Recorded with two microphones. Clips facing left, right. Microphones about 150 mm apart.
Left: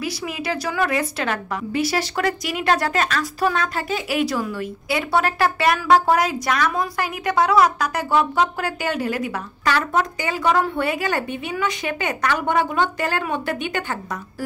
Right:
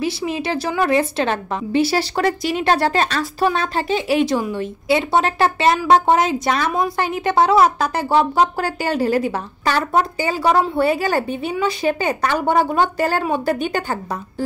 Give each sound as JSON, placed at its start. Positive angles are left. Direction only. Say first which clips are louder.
{"t": 0.0, "sound": "a woman's voice", "louder": "right 5 dB", "side_deg": -25}